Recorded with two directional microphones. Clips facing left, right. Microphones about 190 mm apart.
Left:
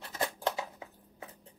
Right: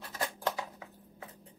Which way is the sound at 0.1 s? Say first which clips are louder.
Left 2 dB; 25° left (ahead or behind).